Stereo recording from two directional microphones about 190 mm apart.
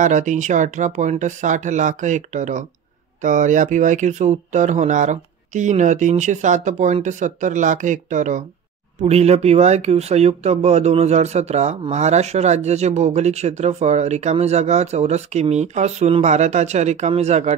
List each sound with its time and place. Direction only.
0.0 s speech: 40° right (ahead or behind)